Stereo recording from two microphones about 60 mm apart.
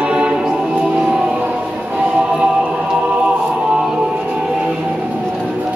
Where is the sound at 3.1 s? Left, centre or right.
Centre.